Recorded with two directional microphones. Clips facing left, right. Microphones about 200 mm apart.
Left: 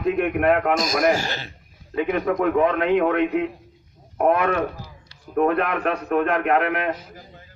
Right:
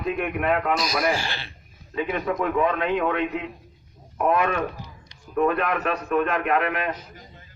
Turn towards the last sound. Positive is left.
turn(degrees=60)  # may be behind; listen again after turning